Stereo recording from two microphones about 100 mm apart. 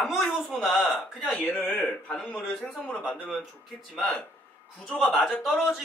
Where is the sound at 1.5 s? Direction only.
20° left (ahead or behind).